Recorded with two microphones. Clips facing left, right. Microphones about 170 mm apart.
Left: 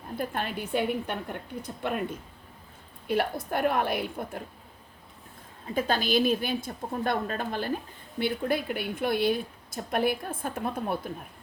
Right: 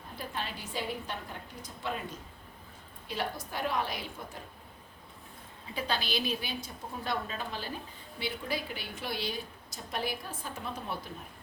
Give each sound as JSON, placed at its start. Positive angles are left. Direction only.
{"t": 0.2, "sound": "a woman's voice", "side_deg": 55}
{"t": 3.1, "sound": "a woman's voice", "side_deg": 55}
{"t": 5.7, "sound": "speech", "side_deg": 45}